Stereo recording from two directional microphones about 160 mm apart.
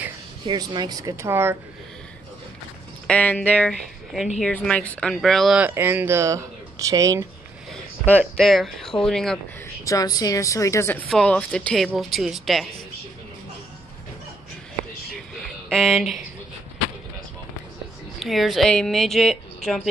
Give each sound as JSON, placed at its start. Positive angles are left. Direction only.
{"t": 0.5, "sound": "speech", "side_deg": -25}
{"t": 3.1, "sound": "speech", "side_deg": 10}
{"t": 8.4, "sound": "speech", "side_deg": 0}
{"t": 9.8, "sound": "a woman's voice", "side_deg": 20}
{"t": 15.7, "sound": "speech", "side_deg": 0}
{"t": 18.2, "sound": "speech", "side_deg": 0}